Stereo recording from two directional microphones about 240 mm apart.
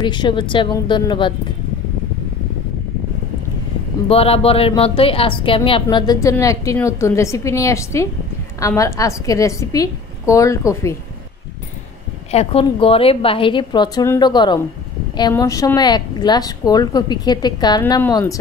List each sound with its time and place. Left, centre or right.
0.0 s a woman's voice: centre
4.1 s a woman's voice: left
12.3 s a woman's voice: left